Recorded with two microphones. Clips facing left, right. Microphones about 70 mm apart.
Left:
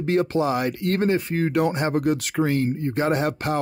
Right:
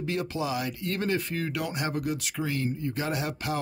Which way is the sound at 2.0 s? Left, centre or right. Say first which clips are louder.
Left 9 dB; left.